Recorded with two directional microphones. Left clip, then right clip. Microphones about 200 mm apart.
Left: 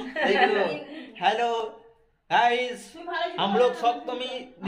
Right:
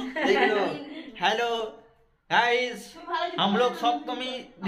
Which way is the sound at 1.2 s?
5° left (ahead or behind).